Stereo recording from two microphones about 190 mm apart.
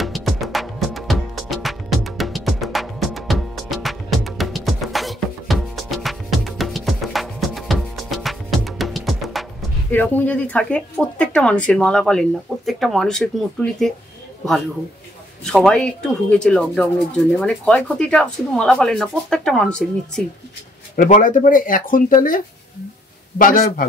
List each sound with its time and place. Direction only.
0.0 s music: centre (ahead or behind)
9.8 s speech: 10° left (ahead or behind)
15.4 s speech: centre (ahead or behind)
20.9 s speech: 45° left (ahead or behind)